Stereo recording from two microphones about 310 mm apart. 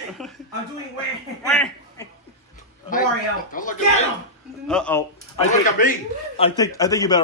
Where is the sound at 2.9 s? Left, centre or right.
Left.